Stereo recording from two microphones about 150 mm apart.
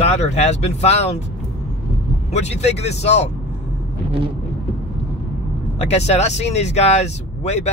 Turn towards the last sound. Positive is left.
turn(degrees=45)  # may be behind; listen again after turning